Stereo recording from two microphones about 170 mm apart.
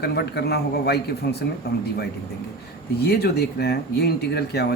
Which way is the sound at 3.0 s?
70° left (ahead or behind).